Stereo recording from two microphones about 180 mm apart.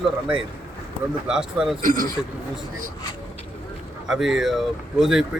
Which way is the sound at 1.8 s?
50° right (ahead or behind).